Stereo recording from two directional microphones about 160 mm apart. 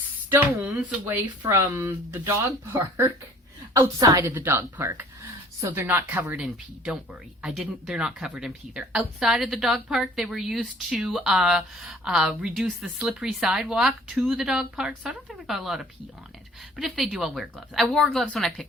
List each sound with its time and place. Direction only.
0.3 s speech: 15° right (ahead or behind)
3.8 s speech: 20° right (ahead or behind); by 18.6 s centre (ahead or behind)